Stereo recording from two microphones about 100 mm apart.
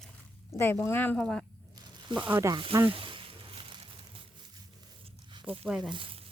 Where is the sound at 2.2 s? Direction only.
15° right (ahead or behind).